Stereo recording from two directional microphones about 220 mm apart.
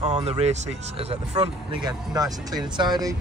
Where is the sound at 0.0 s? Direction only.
30° right (ahead or behind).